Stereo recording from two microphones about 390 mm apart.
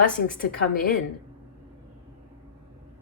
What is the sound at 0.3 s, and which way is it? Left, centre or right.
Speech, left.